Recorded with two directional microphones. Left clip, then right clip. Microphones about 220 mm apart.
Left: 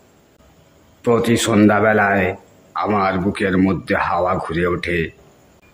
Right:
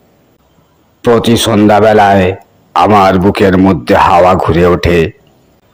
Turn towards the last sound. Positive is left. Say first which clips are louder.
# right 11 dB
turn(degrees=-25)  # may be behind; listen again after turning